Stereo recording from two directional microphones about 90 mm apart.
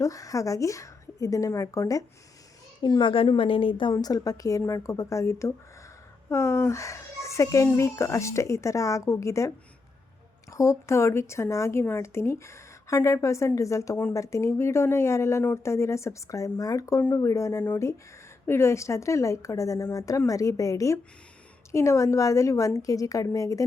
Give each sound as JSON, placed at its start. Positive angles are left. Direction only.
{"t": 0.0, "sound": "a woman's voice", "side_deg": 40}
{"t": 2.8, "sound": "a woman's voice", "side_deg": 60}
{"t": 3.9, "sound": "a woman's voice", "side_deg": 40}
{"t": 10.5, "sound": "a woman's voice", "side_deg": 35}